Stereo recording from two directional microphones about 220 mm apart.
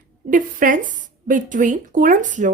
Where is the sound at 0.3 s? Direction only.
35° right (ahead or behind).